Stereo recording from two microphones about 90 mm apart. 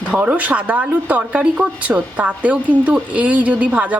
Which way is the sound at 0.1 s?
15° right (ahead or behind).